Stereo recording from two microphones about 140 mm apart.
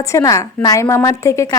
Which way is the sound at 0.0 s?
20° left (ahead or behind).